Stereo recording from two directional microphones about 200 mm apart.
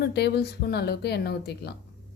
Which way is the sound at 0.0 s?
55° left (ahead or behind).